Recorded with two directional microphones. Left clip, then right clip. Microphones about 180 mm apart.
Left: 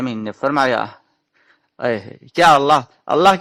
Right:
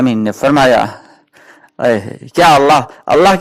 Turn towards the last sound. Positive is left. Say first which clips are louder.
# right 4 dB
turn(degrees=-30)  # may be behind; listen again after turning